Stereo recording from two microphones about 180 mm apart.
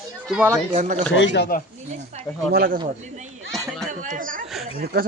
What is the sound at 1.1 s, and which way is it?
Speech, 80° left.